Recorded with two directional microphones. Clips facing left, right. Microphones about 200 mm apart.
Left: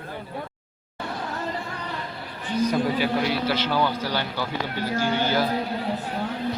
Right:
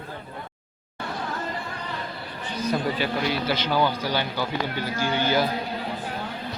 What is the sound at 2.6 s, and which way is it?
A man's voice, 10° left (ahead or behind).